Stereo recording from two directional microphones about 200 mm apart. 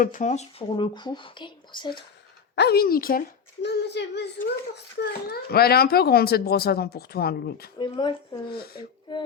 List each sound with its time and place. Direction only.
0.0 s speech: 40° left (ahead or behind)
0.8 s speech: 25° left (ahead or behind)
2.6 s a child's voice: 50° left (ahead or behind)
7.8 s speech: 25° left (ahead or behind)
8.5 s a child's voice: 50° left (ahead or behind)